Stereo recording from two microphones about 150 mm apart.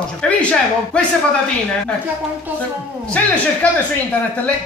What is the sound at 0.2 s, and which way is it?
Speech, 5° left (ahead or behind).